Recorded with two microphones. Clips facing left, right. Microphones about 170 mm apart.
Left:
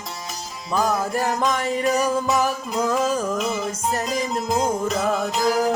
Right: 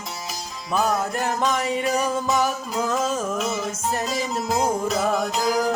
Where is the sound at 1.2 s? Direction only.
Centre (ahead or behind).